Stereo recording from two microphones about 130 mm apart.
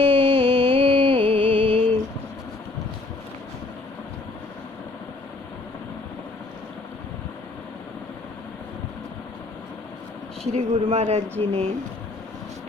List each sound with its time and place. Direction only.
0.0 s music: 40° right (ahead or behind)
10.5 s speech: 55° right (ahead or behind)